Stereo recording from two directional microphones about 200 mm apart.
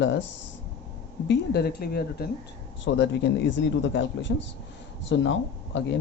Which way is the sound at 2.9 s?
65° left (ahead or behind).